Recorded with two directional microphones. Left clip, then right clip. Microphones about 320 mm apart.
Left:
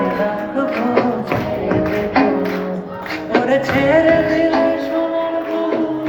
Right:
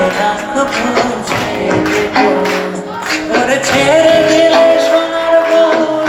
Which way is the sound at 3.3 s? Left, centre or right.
Right.